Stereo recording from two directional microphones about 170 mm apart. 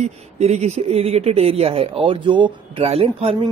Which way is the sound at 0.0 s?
40° right (ahead or behind).